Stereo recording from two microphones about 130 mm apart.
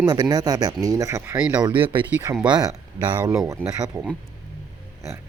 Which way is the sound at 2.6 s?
30° right (ahead or behind).